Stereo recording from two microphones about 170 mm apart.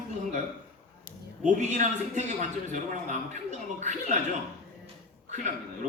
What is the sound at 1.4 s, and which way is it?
Speech, 45° right (ahead or behind).